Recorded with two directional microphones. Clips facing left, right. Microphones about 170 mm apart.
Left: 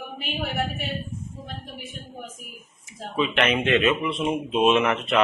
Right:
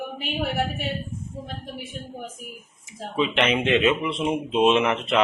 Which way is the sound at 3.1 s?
20° right (ahead or behind).